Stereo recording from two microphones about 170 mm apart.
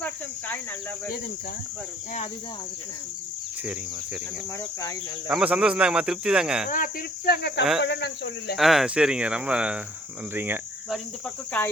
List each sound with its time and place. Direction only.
5.3 s speech: 5° right (ahead or behind)
6.7 s cricket: 55° left (ahead or behind); by 7.6 s 70° left (ahead or behind)
7.8 s speech: 90° left
8.5 s speech: centre (ahead or behind)
10.3 s cricket: 10° right (ahead or behind)